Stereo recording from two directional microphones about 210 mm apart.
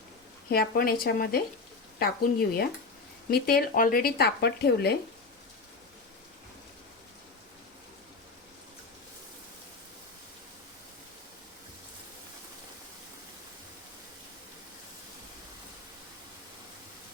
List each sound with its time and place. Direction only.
0.5 s speech: 45° left (ahead or behind)